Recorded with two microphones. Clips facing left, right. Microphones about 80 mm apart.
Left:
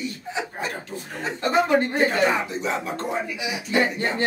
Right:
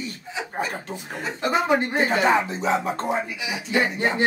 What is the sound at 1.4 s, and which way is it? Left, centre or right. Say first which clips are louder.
Speech: left 1 dB; centre.